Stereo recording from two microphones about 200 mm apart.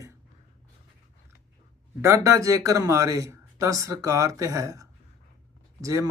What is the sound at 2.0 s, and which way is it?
Speech, 15° right (ahead or behind).